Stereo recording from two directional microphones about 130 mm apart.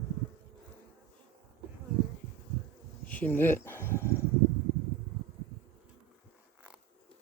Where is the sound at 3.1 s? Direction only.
15° left (ahead or behind).